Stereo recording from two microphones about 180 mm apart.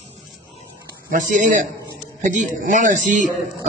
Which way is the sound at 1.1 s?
45° right (ahead or behind).